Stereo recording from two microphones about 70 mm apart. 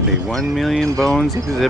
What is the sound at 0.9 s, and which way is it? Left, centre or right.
Speech, centre.